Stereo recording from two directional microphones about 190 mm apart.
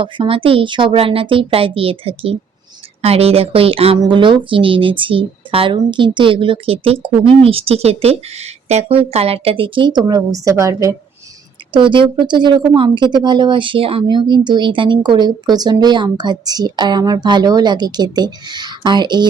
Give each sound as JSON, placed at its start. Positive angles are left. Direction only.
{"t": 0.0, "sound": "speech", "side_deg": -25}